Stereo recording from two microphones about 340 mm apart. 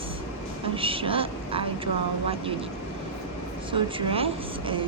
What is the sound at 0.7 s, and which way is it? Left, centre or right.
Speech, centre.